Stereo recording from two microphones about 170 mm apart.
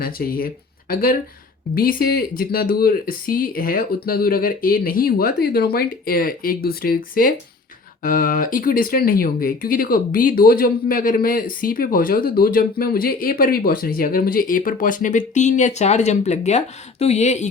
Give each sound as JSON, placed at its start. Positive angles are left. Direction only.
{"t": 0.0, "sound": "speech", "side_deg": 60}